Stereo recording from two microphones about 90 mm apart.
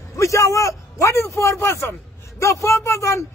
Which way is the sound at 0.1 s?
35° left (ahead or behind).